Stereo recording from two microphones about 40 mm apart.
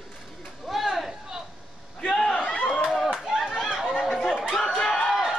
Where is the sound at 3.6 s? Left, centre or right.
Centre.